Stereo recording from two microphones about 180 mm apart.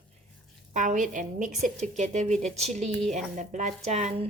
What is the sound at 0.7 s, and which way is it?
A woman's voice, 45° right (ahead or behind).